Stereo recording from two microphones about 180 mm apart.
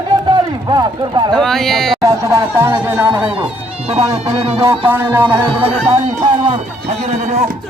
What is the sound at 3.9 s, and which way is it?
Speech, 35° right (ahead or behind).